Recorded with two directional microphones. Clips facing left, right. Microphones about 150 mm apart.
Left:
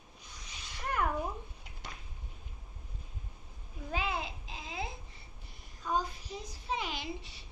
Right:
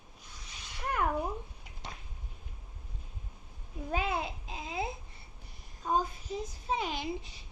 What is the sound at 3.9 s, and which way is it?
Babbling, 50° right (ahead or behind).